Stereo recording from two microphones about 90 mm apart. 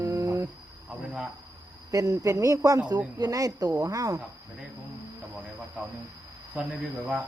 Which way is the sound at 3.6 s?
45° right (ahead or behind).